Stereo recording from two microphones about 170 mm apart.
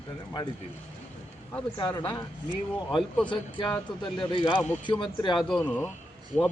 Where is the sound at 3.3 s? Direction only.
30° left (ahead or behind).